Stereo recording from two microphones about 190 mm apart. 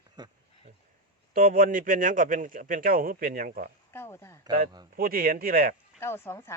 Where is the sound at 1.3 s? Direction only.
50° right (ahead or behind).